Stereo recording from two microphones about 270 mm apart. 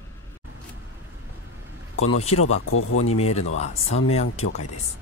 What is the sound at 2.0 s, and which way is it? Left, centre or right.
Speech, left.